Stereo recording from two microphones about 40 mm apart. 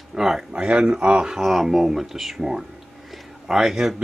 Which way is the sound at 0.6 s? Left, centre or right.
Right.